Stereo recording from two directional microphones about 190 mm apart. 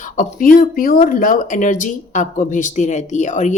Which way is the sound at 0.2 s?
45° left (ahead or behind).